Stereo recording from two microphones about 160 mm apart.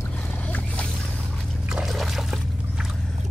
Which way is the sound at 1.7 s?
Centre (ahead or behind).